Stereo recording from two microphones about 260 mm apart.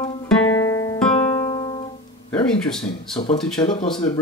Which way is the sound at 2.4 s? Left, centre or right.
Centre.